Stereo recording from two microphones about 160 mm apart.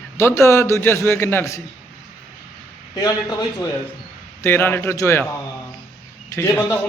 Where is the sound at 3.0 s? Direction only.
25° left (ahead or behind).